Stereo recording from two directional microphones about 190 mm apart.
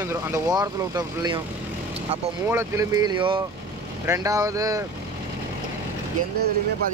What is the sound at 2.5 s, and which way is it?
Speech, 15° right (ahead or behind).